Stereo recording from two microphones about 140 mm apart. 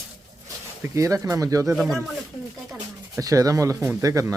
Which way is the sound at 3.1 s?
25° right (ahead or behind).